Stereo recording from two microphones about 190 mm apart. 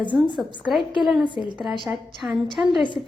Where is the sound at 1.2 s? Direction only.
25° left (ahead or behind).